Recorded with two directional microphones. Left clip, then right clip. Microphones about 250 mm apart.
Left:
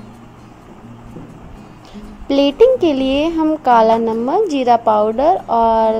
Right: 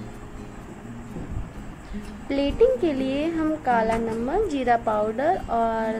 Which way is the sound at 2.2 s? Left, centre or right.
Left.